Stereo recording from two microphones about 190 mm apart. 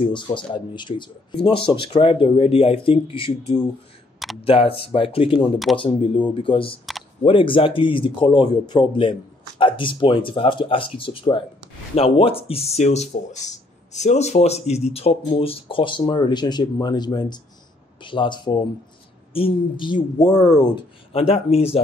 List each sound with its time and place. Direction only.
0.0 s speech: 25° left (ahead or behind)